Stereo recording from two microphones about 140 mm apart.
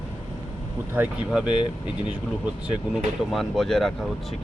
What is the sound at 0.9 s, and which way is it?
Speech, 5° right (ahead or behind).